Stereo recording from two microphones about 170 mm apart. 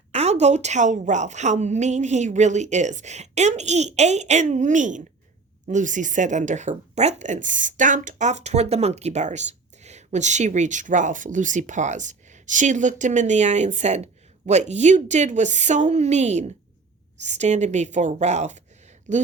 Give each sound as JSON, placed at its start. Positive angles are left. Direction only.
{"t": 0.1, "sound": "speech", "side_deg": -40}